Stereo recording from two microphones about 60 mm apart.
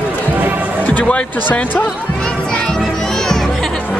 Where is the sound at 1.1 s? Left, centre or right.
Left.